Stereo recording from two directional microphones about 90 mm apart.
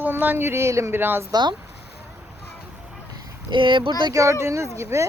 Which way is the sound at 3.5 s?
65° right (ahead or behind).